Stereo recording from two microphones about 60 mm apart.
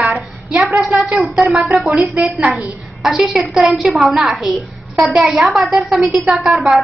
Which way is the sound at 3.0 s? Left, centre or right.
Centre.